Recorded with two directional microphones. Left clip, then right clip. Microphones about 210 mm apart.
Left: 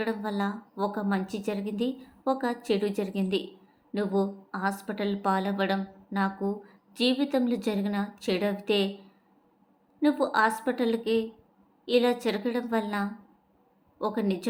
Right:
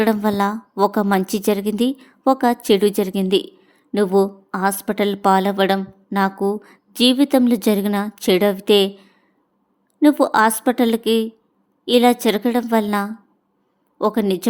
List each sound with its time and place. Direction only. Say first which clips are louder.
0.0 s a woman's voice: right 13 dB; 45° right (ahead or behind)